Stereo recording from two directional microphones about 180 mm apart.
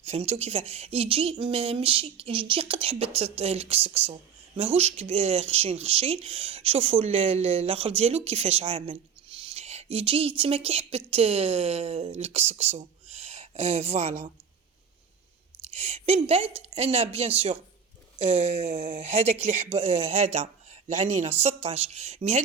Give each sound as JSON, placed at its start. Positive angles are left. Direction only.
{"t": 0.0, "sound": "speech", "side_deg": -35}
{"t": 15.7, "sound": "speech", "side_deg": -35}